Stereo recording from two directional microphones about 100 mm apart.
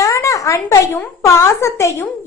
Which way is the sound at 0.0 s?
30° left (ahead or behind).